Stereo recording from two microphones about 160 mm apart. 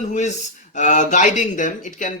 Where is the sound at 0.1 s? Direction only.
50° left (ahead or behind).